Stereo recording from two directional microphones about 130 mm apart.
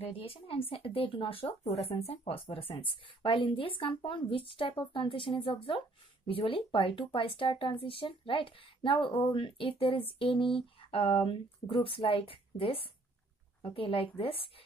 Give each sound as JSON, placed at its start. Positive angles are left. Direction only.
{"t": 0.0, "sound": "speech", "side_deg": 45}
{"t": 13.7, "sound": "speech", "side_deg": 45}